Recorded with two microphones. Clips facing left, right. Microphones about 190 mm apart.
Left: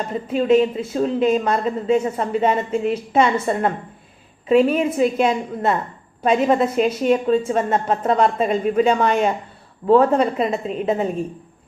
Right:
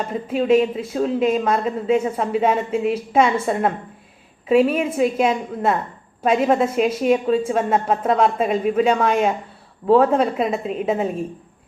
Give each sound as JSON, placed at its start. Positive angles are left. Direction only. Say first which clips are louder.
{"t": 0.1, "sound": "a woman's voice", "louder": "left 1 dB", "side_deg": -5}